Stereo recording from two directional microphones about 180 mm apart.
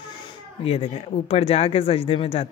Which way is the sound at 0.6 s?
30° left (ahead or behind).